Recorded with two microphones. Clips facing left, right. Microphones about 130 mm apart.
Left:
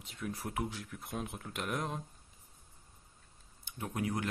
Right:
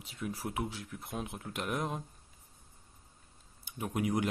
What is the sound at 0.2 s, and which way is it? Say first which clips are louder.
Speech: right 1 dB; 5° right (ahead or behind).